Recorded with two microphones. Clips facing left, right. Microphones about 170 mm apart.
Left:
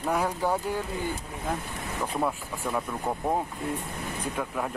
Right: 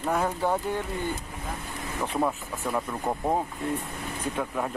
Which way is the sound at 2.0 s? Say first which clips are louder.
Right 2 dB; centre (ahead or behind).